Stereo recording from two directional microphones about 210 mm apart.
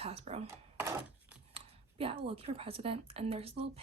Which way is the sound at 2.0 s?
25° right (ahead or behind).